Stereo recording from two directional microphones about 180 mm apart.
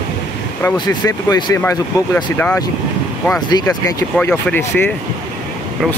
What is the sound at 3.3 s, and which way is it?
Speech, 20° left (ahead or behind).